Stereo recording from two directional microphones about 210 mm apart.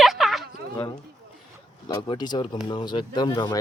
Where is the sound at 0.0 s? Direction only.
Centre (ahead or behind).